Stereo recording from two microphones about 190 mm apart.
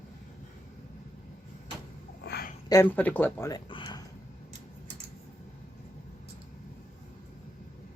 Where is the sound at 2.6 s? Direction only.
15° left (ahead or behind).